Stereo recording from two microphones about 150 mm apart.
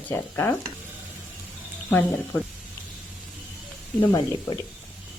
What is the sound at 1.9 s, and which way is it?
Speech, 10° left (ahead or behind).